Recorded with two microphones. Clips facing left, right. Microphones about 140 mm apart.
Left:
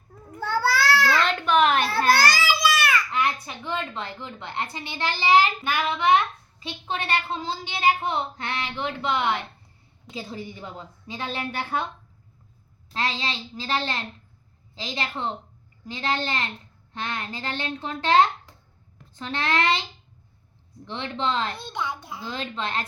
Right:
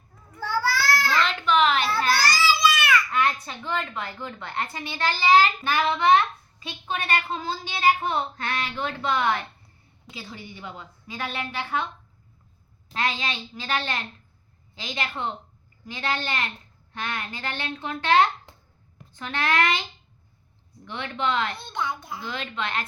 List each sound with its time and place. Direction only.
0.3 s a sound: 60° left (ahead or behind)
1.2 s a sound: 45° left (ahead or behind)
3.1 s a sound: 15° left (ahead or behind)
3.9 s a woman's voice: 25° left (ahead or behind)
6.6 s a woman's voice: 25° left (ahead or behind)
10.1 s a woman's voice: 35° left (ahead or behind)
12.9 s a woman's voice: 30° left (ahead or behind)
19.2 s a woman's voice: 30° left (ahead or behind)
20.8 s a woman's voice: 30° left (ahead or behind)